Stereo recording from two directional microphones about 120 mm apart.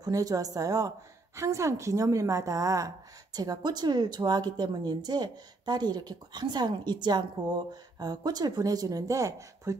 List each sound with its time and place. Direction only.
0.0 s a woman's voice: 30° right (ahead or behind)